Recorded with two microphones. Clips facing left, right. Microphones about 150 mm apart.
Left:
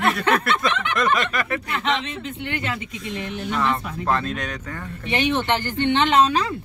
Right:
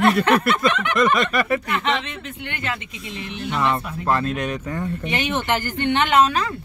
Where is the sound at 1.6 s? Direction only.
30° left (ahead or behind).